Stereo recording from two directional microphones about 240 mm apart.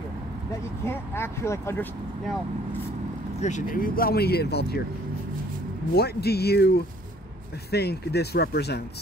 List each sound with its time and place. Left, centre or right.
0.8 s speech: centre
3.3 s speech: left
5.9 s speech: left